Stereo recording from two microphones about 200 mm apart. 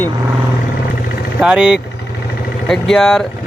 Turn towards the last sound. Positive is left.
turn(degrees=0)  # may be behind; listen again after turning